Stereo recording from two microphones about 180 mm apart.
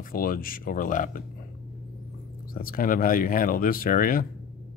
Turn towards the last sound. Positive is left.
turn(degrees=50)  # may be behind; listen again after turning